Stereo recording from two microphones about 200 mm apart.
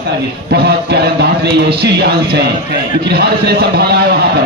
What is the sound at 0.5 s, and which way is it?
A man's voice, 55° right (ahead or behind).